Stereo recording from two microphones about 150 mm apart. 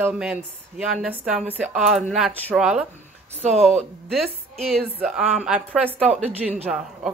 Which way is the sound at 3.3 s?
45° right (ahead or behind).